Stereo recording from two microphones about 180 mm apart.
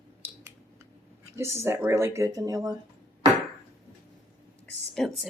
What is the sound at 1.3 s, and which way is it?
Speech, 15° right (ahead or behind).